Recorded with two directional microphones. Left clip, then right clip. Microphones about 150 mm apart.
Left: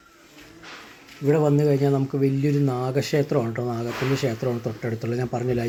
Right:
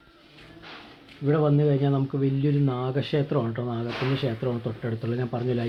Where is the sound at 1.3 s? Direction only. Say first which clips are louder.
Left 3 dB; 15° left (ahead or behind).